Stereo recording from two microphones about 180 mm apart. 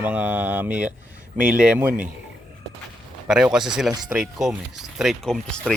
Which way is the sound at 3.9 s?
20° right (ahead or behind).